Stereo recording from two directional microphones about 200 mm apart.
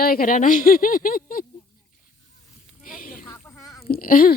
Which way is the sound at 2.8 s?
45° left (ahead or behind).